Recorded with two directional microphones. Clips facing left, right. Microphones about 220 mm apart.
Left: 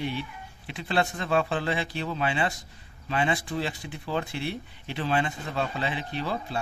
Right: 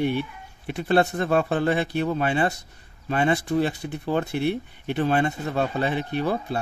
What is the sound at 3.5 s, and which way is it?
Speech, 60° right (ahead or behind).